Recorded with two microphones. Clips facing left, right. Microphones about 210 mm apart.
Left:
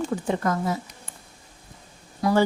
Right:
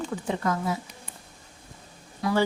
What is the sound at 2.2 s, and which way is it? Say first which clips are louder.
Speech: left 4 dB; 40° left (ahead or behind).